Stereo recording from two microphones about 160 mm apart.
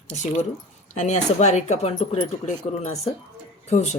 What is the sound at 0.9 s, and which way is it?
A woman's voice, 45° left (ahead or behind).